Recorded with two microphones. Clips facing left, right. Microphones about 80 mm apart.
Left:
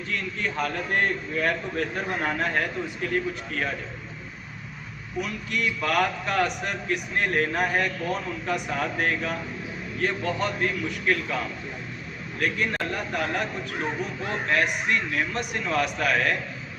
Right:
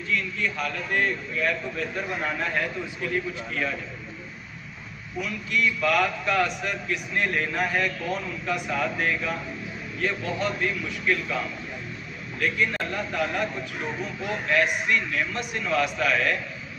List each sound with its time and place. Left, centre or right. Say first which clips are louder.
0.1 s a man's voice: right 2 dB; left
5.2 s a man's voice: right 3 dB; left